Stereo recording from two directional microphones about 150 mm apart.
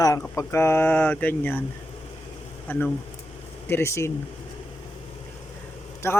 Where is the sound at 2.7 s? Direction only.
10° left (ahead or behind).